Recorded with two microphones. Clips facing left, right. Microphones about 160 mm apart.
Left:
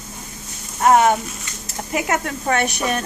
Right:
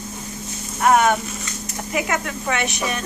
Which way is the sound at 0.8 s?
25° left (ahead or behind).